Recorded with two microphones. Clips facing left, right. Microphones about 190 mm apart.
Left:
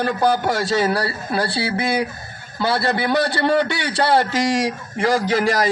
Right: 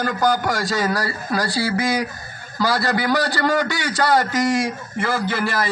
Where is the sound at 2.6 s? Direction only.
25° left (ahead or behind).